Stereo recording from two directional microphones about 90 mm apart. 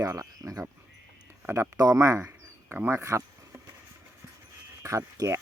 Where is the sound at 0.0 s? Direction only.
40° right (ahead or behind).